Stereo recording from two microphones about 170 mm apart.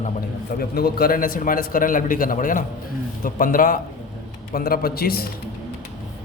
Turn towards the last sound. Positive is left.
turn(degrees=65)  # may be behind; listen again after turning